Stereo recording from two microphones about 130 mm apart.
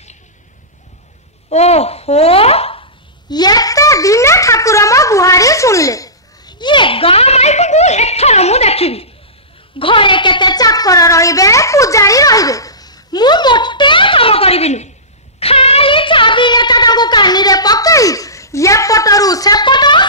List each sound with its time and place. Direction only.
1.5 s speech: 55° left (ahead or behind)
3.3 s a woman's voice: 30° left (ahead or behind)